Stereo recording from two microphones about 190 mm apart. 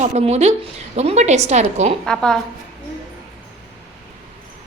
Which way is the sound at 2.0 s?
5° left (ahead or behind).